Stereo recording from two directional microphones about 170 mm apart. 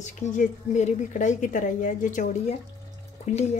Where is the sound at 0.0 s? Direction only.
45° left (ahead or behind).